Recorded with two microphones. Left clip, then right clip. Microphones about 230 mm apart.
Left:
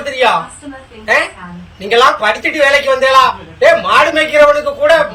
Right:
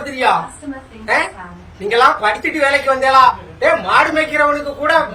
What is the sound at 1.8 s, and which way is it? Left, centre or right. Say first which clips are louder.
A man's voice: left 3 dB; centre.